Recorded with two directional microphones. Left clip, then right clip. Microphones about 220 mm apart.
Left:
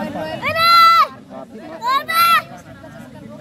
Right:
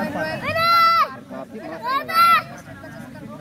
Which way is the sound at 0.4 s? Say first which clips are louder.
Left 6 dB; 40° left (ahead or behind).